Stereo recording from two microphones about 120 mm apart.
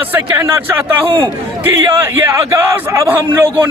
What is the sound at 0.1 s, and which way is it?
A man's voice, 20° right (ahead or behind).